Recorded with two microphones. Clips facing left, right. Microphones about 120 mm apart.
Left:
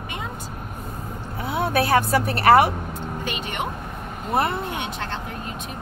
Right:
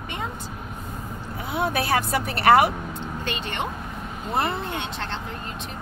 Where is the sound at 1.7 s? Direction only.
45° left (ahead or behind).